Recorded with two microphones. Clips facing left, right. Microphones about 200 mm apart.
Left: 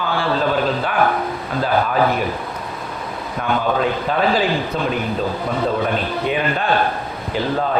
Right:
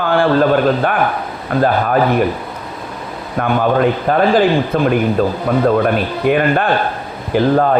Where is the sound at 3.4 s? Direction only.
55° right (ahead or behind).